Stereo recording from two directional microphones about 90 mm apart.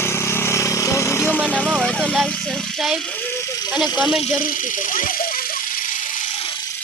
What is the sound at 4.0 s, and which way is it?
Speech, centre (ahead or behind).